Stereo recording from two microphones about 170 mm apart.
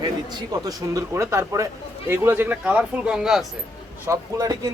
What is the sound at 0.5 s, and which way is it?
Speech, 20° right (ahead or behind).